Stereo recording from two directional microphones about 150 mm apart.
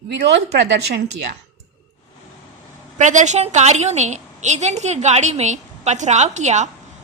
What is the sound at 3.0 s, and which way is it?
A woman's voice, 55° right (ahead or behind).